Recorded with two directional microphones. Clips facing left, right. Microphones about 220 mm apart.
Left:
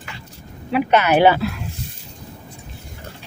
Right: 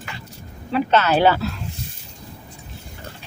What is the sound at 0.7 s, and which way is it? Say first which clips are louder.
Speech: left 2 dB; 15° left (ahead or behind).